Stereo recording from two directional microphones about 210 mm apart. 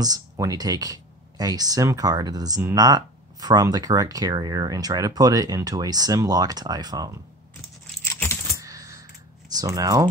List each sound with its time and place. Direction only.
0.0 s speech: 15° right (ahead or behind)
8.0 s keys jangling: 10° left (ahead or behind)
8.5 s coin: 15° right (ahead or behind)
9.5 s speech: 15° right (ahead or behind)